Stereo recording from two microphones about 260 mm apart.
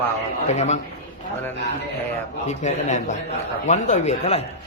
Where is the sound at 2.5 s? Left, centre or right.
Left.